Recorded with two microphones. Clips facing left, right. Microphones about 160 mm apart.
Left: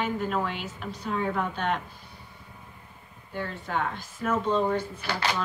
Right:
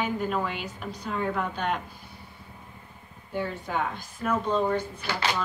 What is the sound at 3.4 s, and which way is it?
A woman's voice, 5° right (ahead or behind).